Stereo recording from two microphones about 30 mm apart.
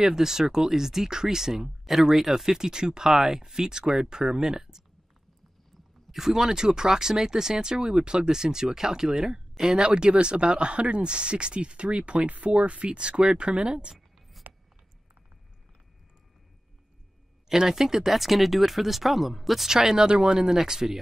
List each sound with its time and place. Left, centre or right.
0.0 s speech: centre
3.1 s speech: centre
6.1 s speech: centre
9.7 s speech: right
13.9 s a sound: centre
17.5 s speech: centre
19.7 s speech: centre